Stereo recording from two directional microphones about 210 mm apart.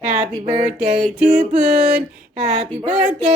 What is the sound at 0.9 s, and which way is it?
Music, 30° right (ahead or behind).